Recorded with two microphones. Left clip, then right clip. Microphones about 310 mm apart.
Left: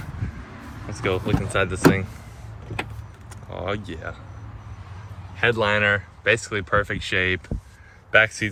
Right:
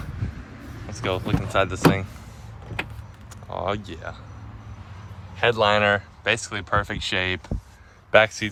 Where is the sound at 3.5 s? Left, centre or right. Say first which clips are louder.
Right 2 dB; centre.